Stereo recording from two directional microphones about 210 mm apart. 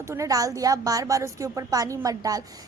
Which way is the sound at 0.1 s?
15° right (ahead or behind).